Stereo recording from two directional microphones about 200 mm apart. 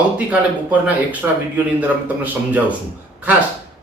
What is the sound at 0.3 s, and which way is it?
Speech, 5° right (ahead or behind).